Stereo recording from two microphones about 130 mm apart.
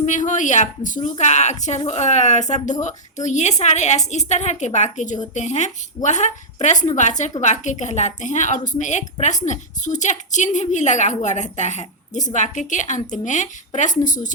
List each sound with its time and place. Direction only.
0.0 s a woman's voice: 70° left (ahead or behind)
1.2 s a woman's voice: 60° left (ahead or behind); by 14.3 s 80° left